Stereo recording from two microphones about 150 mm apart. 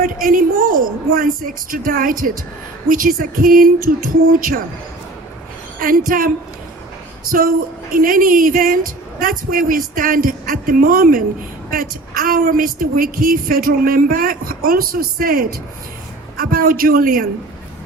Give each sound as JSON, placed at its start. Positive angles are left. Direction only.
{"t": 0.0, "sound": "a woman's voice", "side_deg": -65}
{"t": 5.8, "sound": "a woman's voice", "side_deg": -70}